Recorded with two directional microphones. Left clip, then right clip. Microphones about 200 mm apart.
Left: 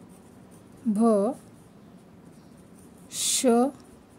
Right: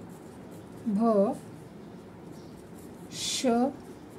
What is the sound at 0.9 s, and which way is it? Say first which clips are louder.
Speech: left 2 dB; 55° left (ahead or behind).